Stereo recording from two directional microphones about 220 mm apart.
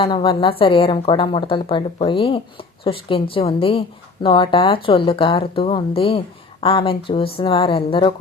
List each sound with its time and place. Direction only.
0.0 s a woman's voice: 25° left (ahead or behind)